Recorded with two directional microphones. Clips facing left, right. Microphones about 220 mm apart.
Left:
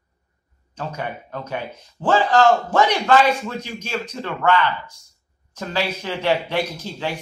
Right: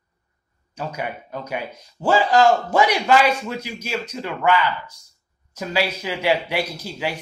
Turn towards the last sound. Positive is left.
turn(degrees=-10)  # may be behind; listen again after turning